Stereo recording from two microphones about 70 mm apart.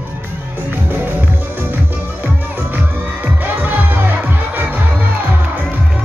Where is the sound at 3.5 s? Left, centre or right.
Right.